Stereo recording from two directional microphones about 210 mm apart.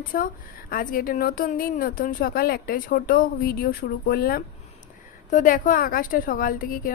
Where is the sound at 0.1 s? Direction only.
45° left (ahead or behind).